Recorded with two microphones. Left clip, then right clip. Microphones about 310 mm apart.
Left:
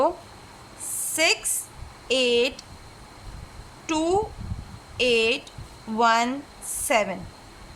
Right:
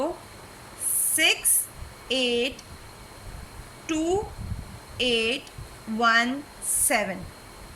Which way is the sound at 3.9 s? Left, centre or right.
Centre.